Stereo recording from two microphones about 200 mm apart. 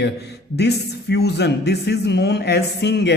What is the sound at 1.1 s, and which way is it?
A man's voice, 55° left (ahead or behind).